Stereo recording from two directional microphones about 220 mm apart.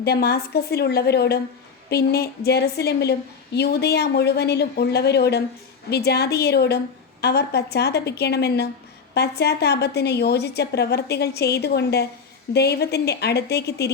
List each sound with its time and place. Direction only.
0.0 s a woman's voice: 45° left (ahead or behind)